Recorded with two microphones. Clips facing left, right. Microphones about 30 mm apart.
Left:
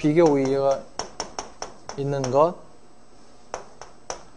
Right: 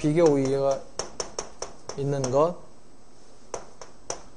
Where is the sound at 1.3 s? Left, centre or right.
Centre.